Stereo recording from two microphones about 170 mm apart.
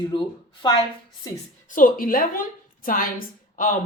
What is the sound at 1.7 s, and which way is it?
A woman's voice, 50° left (ahead or behind).